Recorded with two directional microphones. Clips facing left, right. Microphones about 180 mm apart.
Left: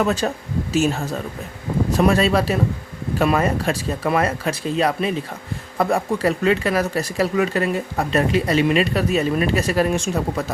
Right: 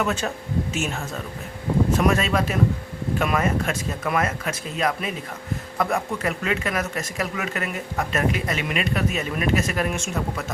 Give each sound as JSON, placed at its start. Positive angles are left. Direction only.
{"t": 0.0, "sound": "speech", "side_deg": 35}